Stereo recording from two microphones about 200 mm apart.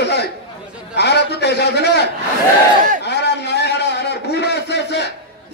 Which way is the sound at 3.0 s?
55° left (ahead or behind).